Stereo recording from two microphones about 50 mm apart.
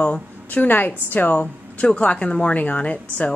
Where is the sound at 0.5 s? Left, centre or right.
Left.